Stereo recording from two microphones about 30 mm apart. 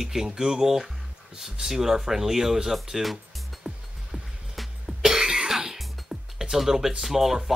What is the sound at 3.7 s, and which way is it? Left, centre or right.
Music, right.